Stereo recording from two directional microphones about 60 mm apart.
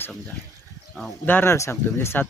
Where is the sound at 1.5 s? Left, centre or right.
Left.